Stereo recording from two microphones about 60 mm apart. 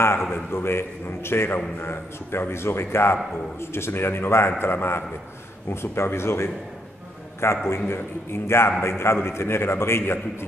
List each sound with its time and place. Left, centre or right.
0.3 s a man's voice: left